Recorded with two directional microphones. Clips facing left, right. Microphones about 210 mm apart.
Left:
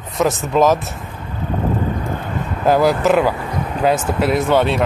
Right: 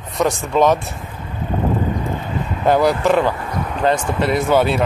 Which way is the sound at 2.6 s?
Centre (ahead or behind).